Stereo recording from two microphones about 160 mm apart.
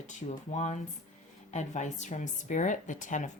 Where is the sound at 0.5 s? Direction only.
45° left (ahead or behind).